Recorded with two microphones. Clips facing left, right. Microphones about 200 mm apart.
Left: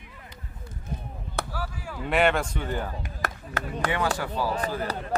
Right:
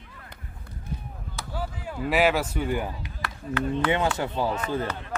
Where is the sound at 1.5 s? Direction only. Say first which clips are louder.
Right 2 dB; 20° right (ahead or behind).